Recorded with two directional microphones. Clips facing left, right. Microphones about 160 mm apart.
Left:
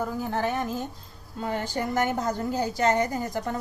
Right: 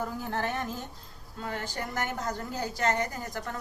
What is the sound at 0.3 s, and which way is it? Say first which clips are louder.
A woman's voice: left 4 dB; 10° left (ahead or behind).